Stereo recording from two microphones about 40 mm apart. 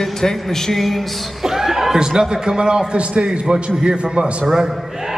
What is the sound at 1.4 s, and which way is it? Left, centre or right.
A man's voice, centre.